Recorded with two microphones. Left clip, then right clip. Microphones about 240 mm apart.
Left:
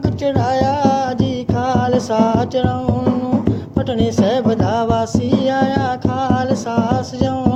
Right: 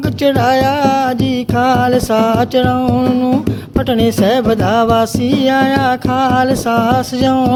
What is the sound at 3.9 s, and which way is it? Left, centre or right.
Speech, right.